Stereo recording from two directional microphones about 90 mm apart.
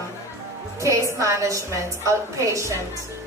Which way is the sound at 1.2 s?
35° right (ahead or behind).